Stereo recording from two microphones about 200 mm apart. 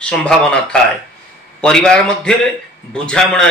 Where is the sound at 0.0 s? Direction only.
5° left (ahead or behind).